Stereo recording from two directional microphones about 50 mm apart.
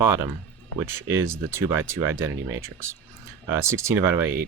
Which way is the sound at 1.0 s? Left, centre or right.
Right.